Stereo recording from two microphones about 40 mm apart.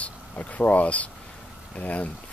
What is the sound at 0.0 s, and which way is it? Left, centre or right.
Speech, left.